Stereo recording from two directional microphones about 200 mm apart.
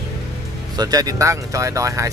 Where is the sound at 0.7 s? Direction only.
20° right (ahead or behind).